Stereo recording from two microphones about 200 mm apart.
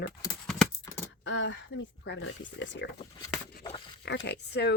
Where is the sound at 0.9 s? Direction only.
15° left (ahead or behind).